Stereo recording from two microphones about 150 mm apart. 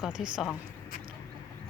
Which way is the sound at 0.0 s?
5° right (ahead or behind).